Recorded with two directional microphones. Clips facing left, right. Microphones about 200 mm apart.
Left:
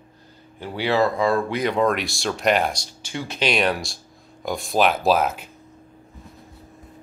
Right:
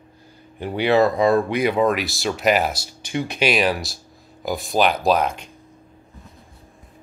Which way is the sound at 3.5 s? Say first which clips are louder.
Left 1 dB; centre (ahead or behind).